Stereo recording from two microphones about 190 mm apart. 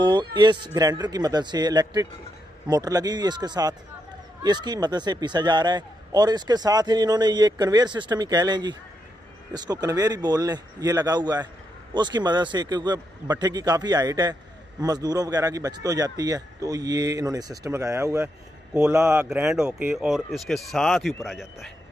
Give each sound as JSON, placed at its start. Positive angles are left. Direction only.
{"t": 0.0, "sound": "a man's voice", "side_deg": -25}